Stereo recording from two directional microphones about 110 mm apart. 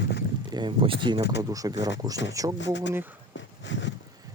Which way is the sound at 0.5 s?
45° right (ahead or behind).